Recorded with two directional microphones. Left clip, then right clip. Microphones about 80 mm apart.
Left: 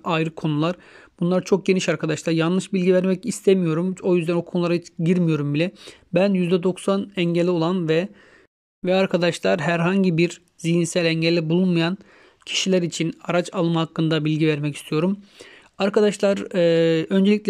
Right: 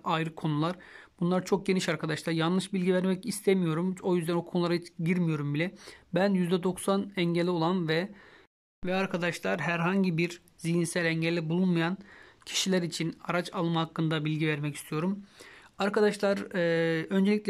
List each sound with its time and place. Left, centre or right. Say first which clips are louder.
0.0 s speech: left 7 dB; left
5.0 s speech: left 10 dB; left
8.8 s speech: left 11 dB; left
12.4 s speech: left 8 dB; left